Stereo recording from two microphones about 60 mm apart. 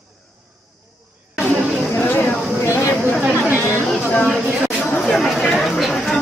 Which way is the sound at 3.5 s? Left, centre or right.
Left.